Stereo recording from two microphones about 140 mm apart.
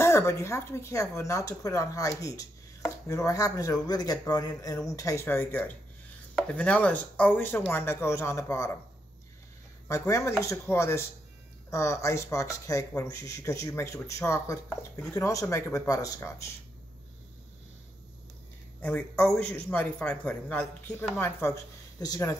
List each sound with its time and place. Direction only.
0.0 s a man's voice: 20° left (ahead or behind)
9.8 s speech: 20° left (ahead or behind)
18.8 s a man's voice: 10° left (ahead or behind); by 22.4 s 25° left (ahead or behind)